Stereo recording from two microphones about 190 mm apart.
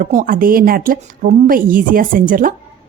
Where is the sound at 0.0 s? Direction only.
45° right (ahead or behind).